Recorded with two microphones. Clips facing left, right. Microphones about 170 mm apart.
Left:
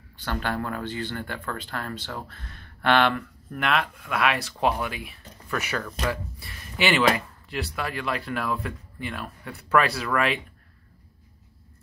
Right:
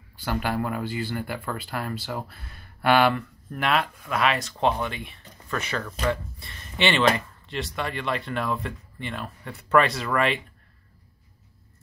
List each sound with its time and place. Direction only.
0.2 s speech: 10° right (ahead or behind)